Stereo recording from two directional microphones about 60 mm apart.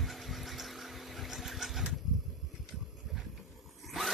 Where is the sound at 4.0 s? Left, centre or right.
Centre.